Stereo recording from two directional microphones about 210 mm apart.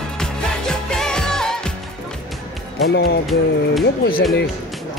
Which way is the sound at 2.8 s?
50° left (ahead or behind).